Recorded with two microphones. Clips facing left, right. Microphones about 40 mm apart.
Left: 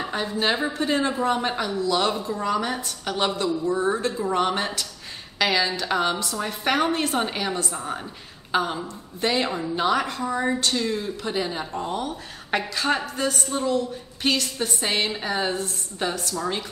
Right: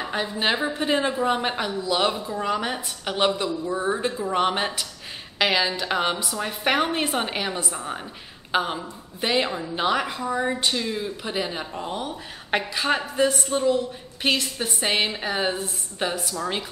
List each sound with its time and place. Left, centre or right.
0.0 s speech: centre
0.7 s speech: right